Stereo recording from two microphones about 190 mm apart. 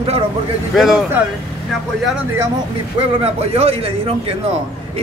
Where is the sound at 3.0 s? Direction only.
30° right (ahead or behind).